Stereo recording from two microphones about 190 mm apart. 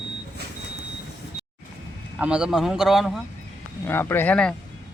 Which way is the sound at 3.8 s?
10° left (ahead or behind).